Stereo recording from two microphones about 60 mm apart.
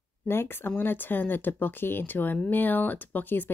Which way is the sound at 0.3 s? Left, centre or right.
Left.